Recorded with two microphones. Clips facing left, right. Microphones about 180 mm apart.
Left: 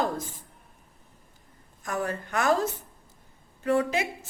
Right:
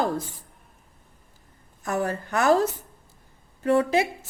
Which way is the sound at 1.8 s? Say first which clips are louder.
Right 4 dB; 35° right (ahead or behind).